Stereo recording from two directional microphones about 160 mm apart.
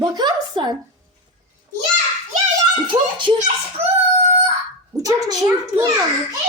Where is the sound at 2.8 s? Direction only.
30° right (ahead or behind).